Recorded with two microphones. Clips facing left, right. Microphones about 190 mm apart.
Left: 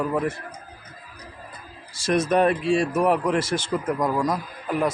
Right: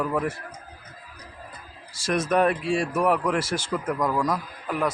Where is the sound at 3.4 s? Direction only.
5° right (ahead or behind).